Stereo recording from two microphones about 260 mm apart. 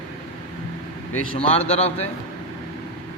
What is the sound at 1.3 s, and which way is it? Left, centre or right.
Speech, left.